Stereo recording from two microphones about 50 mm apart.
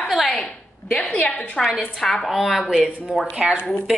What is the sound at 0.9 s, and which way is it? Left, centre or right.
Speech, centre.